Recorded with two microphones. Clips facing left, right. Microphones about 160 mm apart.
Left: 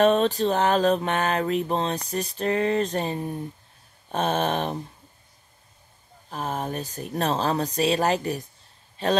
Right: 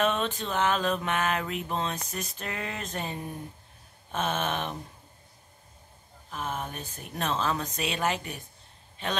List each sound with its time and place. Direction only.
0.0 s mantra: 35° left (ahead or behind)
6.3 s mantra: 35° left (ahead or behind)
9.0 s a man's voice: 35° left (ahead or behind)